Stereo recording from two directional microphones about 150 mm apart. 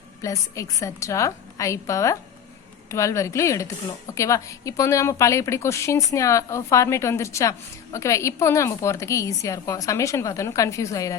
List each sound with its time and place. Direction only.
0.2 s a woman's voice: 20° left (ahead or behind)